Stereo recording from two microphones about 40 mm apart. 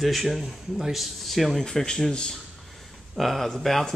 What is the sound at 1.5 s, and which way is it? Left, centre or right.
Speech, centre.